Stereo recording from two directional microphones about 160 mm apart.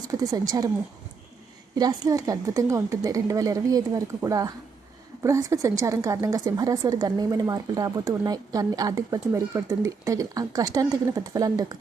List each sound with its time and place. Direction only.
0.1 s speech: 25° right (ahead or behind)
1.7 s speech: 25° right (ahead or behind)